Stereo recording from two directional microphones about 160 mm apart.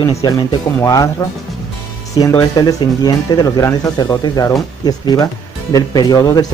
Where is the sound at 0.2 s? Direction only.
25° left (ahead or behind).